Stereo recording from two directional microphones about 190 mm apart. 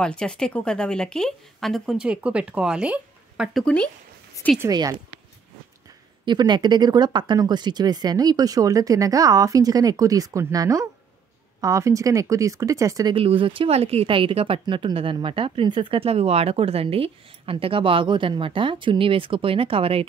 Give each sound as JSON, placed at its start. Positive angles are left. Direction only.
{"t": 0.0, "sound": "a woman's voice", "side_deg": 5}
{"t": 4.6, "sound": "speech", "side_deg": -20}
{"t": 6.2, "sound": "speech", "side_deg": -20}